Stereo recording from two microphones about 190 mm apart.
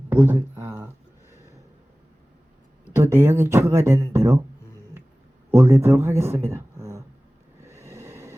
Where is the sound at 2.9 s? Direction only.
10° right (ahead or behind).